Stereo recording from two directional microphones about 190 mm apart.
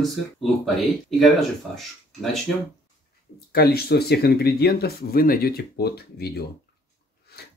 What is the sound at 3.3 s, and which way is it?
Speech, 55° left (ahead or behind).